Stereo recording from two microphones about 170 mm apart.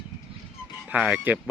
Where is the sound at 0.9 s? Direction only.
5° right (ahead or behind).